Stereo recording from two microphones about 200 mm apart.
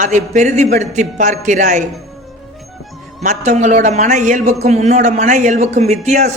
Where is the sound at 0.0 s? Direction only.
35° right (ahead or behind).